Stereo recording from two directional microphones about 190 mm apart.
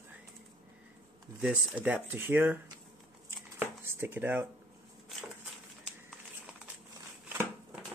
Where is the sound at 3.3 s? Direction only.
10° right (ahead or behind).